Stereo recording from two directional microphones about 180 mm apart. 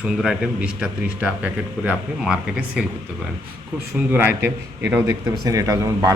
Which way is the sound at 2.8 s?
5° right (ahead or behind).